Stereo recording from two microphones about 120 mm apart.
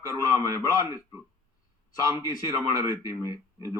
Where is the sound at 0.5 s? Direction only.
30° left (ahead or behind).